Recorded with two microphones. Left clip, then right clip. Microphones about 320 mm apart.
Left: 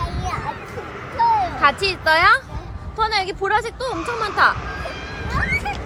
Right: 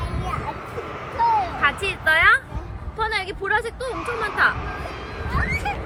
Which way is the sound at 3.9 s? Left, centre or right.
Right.